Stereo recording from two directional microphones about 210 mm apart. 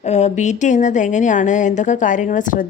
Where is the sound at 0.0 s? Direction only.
35° left (ahead or behind).